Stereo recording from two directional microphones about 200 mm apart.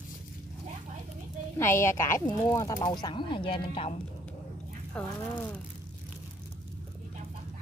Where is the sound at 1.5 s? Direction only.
10° left (ahead or behind).